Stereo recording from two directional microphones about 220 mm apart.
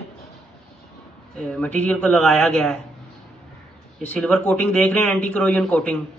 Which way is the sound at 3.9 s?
5° left (ahead or behind).